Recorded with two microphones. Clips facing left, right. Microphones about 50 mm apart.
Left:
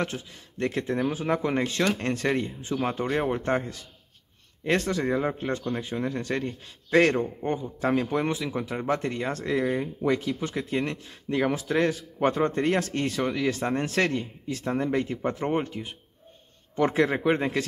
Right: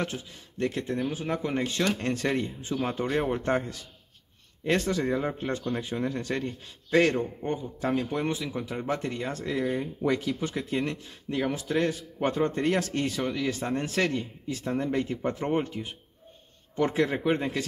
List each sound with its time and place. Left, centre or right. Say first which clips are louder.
0.0 s speech: left 2 dB; left
1.6 s a man's voice: left 2 dB; left
2.0 s speech: left 1 dB; left
3.1 s speech: even; left
4.6 s speech: left 1 dB; left
5.0 s speech: left 2 dB; left
6.9 s a man's voice: left 2 dB; left
7.9 s a man's voice: left 3 dB; left
9.8 s speech: left 2 dB; left
10.6 s speech: left 1 dB; left
11.1 s a man's voice: left 3 dB; left
12.6 s a man's voice: left 1 dB; left
16.7 s a man's voice: left 2 dB; left